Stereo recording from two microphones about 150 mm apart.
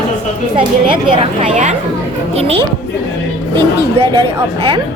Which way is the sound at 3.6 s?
35° right (ahead or behind).